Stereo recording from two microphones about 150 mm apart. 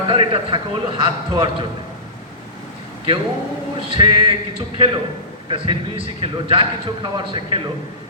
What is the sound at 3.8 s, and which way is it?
Speech, 35° right (ahead or behind).